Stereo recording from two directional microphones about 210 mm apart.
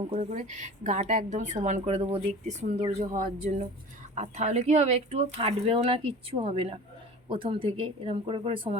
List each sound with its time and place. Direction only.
0.0 s a woman's voice: 30° right (ahead or behind)